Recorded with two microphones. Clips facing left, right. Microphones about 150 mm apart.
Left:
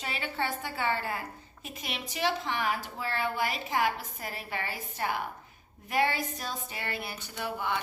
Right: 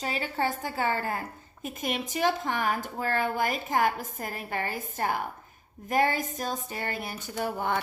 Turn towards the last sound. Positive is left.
turn(degrees=-45)  # may be behind; listen again after turning